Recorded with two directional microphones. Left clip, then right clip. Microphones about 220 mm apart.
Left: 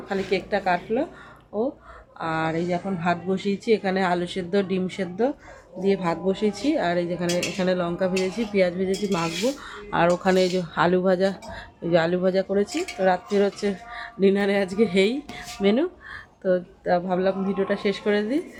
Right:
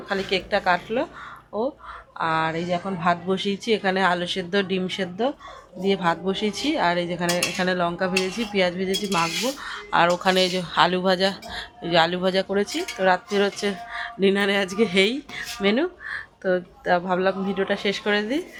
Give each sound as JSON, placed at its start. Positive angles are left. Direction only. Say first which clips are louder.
{"t": 0.1, "sound": "a woman's voice", "louder": "right 1 dB", "side_deg": 5}
{"t": 2.1, "sound": "speech", "louder": "right 2 dB", "side_deg": 5}
{"t": 9.6, "sound": "speech", "louder": "right 3 dB", "side_deg": 15}
{"t": 12.5, "sound": "speech", "louder": "even", "side_deg": 10}